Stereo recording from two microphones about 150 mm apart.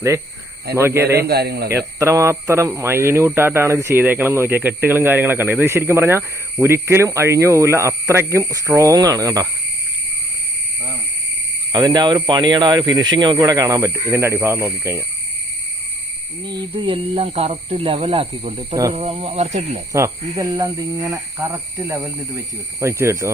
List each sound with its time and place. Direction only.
0.8 s speech: 15° right (ahead or behind)
1.1 s a man's voice: 90° right
1.7 s speech: 20° right (ahead or behind)
11.9 s speech: 30° right (ahead or behind)
16.5 s speech: 30° right (ahead or behind)
19.9 s speech: 20° right (ahead or behind)